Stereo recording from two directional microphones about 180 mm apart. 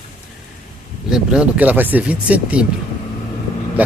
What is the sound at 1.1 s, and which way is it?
Speech, 5° right (ahead or behind).